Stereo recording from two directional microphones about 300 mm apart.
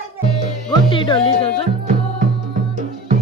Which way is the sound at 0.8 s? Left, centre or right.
Centre.